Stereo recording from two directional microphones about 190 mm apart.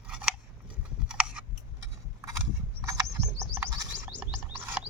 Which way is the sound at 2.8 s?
15° right (ahead or behind).